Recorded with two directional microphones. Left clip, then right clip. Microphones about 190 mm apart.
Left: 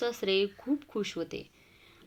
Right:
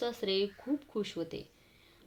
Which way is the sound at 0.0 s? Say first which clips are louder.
Left 4 dB; 15° left (ahead or behind).